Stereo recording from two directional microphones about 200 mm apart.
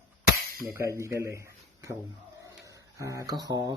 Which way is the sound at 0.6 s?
15° right (ahead or behind).